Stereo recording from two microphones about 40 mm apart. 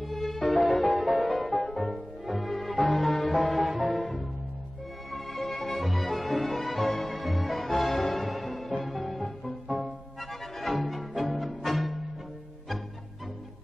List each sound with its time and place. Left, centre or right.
0.1 s music: centre
5.1 s music: centre
9.7 s music: right
10.6 s music: centre